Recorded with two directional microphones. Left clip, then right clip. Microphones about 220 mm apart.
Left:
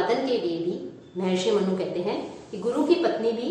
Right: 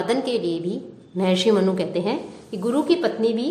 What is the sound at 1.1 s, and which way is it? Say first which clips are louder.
Speech: right 5 dB; 55° right (ahead or behind).